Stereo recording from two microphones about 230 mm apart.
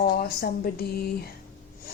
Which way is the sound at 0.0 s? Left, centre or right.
Left.